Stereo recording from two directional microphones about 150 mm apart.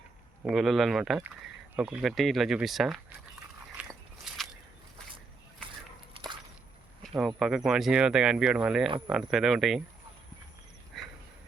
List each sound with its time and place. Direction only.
0.4 s speech: centre (ahead or behind)
3.8 s biting: 10° right (ahead or behind)
4.3 s a sound: 5° right (ahead or behind)
6.1 s whip: 30° right (ahead or behind)
7.0 s speech: centre (ahead or behind)
10.9 s dog: centre (ahead or behind)